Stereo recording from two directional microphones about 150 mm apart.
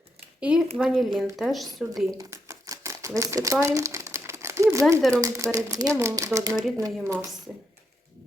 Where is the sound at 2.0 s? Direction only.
20° right (ahead or behind).